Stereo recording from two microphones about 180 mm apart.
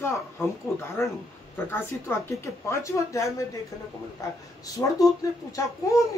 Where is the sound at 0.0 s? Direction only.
15° left (ahead or behind).